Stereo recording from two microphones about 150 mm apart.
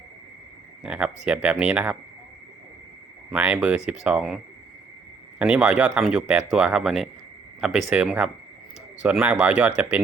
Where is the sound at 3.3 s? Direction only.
10° right (ahead or behind).